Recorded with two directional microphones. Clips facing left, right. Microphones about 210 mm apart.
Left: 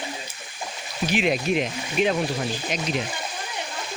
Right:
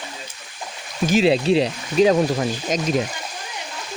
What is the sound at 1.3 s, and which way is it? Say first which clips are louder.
Speech: right 6 dB; 30° right (ahead or behind).